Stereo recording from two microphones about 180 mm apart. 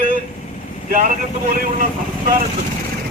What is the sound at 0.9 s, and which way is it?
Speech, 50° right (ahead or behind).